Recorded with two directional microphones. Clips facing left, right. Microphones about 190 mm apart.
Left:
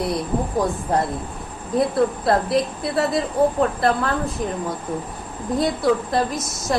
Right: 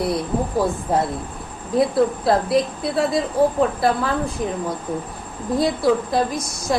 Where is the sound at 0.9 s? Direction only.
Centre (ahead or behind).